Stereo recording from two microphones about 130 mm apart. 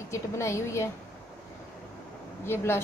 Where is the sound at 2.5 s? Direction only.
20° left (ahead or behind).